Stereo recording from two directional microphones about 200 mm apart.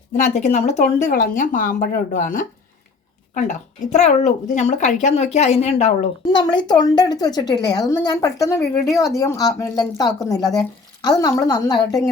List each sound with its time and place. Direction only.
0.2 s a woman's voice: 35° left (ahead or behind); by 11.9 s 20° left (ahead or behind)